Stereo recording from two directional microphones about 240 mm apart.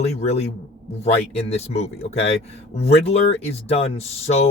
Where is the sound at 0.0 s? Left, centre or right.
Left.